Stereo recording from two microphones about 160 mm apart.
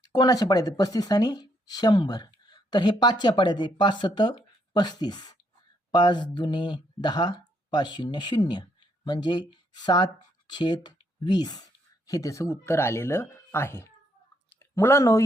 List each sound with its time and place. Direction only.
0.1 s speech: 25° left (ahead or behind)